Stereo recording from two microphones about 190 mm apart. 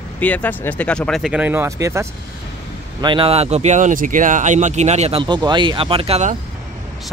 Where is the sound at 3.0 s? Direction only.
25° right (ahead or behind).